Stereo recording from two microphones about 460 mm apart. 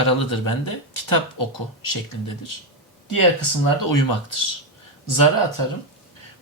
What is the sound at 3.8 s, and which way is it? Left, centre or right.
Speech, left.